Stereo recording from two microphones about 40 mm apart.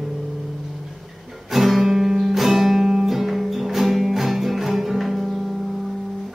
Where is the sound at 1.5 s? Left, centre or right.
Centre.